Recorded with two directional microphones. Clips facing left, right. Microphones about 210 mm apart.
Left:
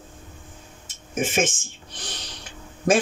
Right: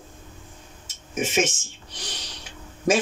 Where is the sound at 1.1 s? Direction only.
50° left (ahead or behind).